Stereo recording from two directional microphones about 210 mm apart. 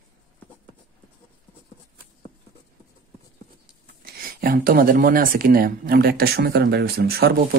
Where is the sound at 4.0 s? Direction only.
45° right (ahead or behind).